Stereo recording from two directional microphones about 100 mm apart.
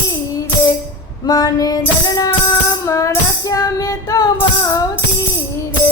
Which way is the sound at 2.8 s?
30° left (ahead or behind).